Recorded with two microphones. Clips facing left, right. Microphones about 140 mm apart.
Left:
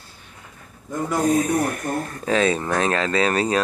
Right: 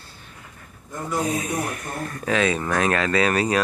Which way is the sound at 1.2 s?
45° left (ahead or behind).